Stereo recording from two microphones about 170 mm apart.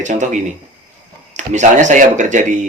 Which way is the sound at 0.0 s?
45° right (ahead or behind).